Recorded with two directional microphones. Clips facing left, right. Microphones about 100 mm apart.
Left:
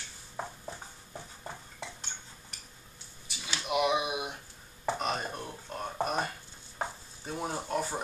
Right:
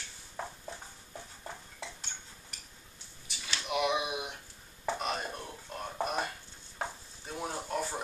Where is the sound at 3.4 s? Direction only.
10° left (ahead or behind).